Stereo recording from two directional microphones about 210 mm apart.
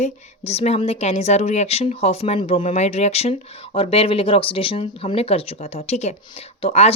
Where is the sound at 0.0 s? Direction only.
30° left (ahead or behind).